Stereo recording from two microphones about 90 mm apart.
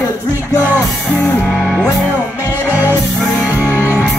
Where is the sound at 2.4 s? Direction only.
20° right (ahead or behind).